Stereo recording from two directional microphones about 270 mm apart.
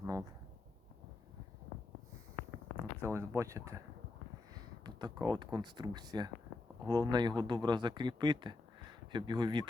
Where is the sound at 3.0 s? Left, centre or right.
Centre.